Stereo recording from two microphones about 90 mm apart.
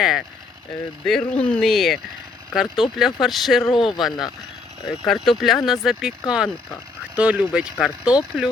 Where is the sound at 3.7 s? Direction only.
65° left (ahead or behind).